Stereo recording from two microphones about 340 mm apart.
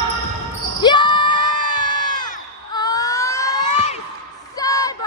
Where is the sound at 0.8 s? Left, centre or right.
Centre.